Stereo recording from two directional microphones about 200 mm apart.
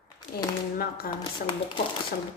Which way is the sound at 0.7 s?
50° left (ahead or behind).